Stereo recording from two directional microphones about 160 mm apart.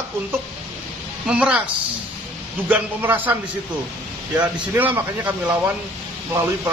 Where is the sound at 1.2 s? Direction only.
5° right (ahead or behind).